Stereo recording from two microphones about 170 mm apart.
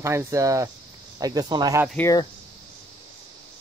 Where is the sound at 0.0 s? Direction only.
15° right (ahead or behind).